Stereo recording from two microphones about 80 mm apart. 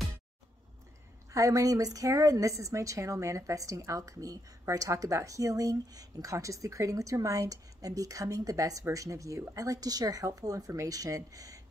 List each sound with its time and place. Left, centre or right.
1.3 s a woman's voice: right